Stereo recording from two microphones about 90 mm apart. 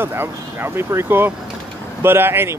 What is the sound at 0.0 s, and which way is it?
Speech, 25° right (ahead or behind).